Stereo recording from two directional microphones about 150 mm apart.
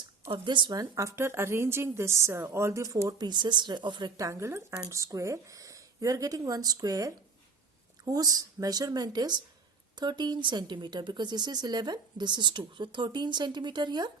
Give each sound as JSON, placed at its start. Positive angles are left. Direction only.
{"t": 0.3, "sound": "a woman's voice", "side_deg": -30}